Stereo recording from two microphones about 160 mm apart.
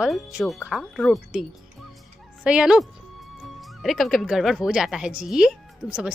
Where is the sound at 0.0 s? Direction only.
5° right (ahead or behind).